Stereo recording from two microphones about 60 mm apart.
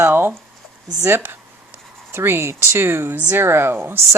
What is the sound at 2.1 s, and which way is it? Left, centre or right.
Speech, right.